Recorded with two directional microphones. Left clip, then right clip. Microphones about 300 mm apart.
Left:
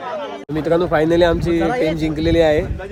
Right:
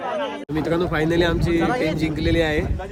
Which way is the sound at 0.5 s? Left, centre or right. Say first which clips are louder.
Left 6 dB; centre.